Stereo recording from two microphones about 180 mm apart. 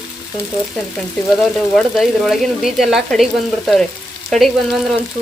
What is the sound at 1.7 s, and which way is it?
Speech, centre (ahead or behind).